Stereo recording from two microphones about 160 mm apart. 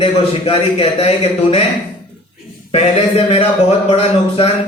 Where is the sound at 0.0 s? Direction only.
35° left (ahead or behind).